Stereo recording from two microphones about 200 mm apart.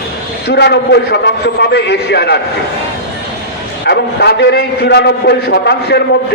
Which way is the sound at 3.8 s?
55° left (ahead or behind).